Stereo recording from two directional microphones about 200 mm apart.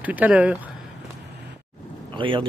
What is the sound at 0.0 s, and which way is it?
Speech, 10° right (ahead or behind).